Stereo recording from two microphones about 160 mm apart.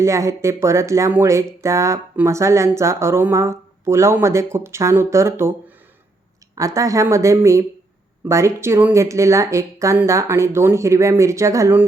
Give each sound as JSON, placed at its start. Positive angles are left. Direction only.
{"t": 0.0, "sound": "speech", "side_deg": -20}